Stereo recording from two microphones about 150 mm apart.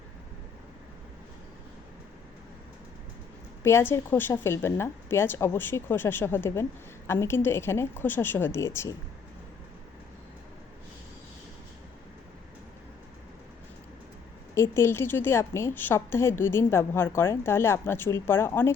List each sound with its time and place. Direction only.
3.6 s a woman's voice: 15° left (ahead or behind)
14.5 s a woman's voice: 15° left (ahead or behind)